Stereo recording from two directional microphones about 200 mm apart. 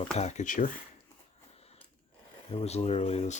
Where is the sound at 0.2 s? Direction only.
35° left (ahead or behind).